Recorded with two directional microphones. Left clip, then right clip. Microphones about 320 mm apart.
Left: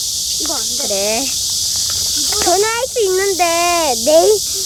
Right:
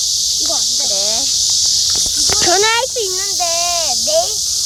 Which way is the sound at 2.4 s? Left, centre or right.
Centre.